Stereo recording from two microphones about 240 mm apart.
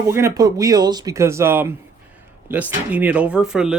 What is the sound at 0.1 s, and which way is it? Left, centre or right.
Speech, centre.